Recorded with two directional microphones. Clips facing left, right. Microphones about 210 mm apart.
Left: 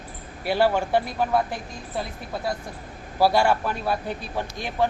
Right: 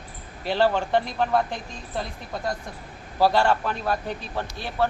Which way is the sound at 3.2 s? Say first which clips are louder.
Left 1 dB; 10° left (ahead or behind).